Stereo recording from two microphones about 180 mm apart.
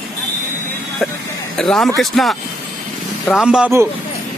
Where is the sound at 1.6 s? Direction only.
5° left (ahead or behind).